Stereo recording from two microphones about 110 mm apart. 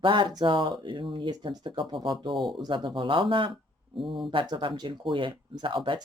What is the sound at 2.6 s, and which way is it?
Speech, 40° right (ahead or behind).